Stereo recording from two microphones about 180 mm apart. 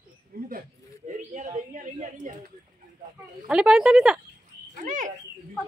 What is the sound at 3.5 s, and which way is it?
Speech, 5° right (ahead or behind).